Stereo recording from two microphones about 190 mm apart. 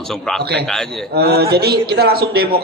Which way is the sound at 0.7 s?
5° left (ahead or behind).